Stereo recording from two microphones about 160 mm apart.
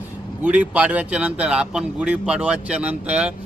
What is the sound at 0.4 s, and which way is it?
Speech, 10° right (ahead or behind).